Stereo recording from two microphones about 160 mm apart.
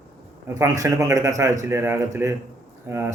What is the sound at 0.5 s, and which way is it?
A man's voice, 20° right (ahead or behind).